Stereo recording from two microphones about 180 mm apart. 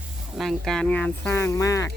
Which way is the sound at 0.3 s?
Centre (ahead or behind).